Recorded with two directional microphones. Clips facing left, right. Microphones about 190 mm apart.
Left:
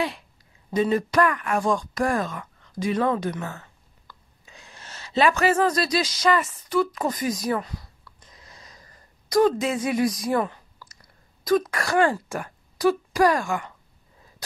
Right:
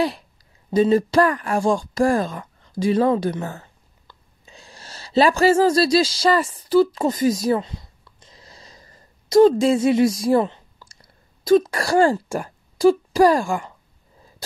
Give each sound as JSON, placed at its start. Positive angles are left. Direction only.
{"t": 0.7, "sound": "speech", "side_deg": -30}